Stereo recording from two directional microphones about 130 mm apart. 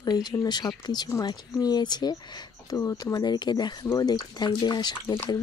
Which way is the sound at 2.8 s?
20° left (ahead or behind).